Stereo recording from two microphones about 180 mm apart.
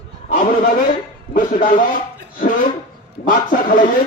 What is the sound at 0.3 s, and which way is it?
A man's voice, 50° left (ahead or behind).